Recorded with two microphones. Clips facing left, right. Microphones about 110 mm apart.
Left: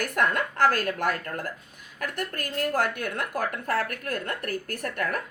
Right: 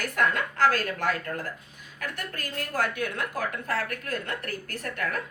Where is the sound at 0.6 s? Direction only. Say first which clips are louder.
Left 1 dB; 50° left (ahead or behind).